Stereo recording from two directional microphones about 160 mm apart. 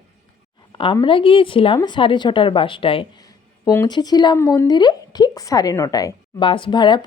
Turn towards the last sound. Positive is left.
turn(degrees=30)  # may be behind; listen again after turning